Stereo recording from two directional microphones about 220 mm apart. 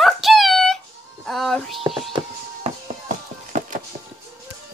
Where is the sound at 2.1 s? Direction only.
30° right (ahead or behind).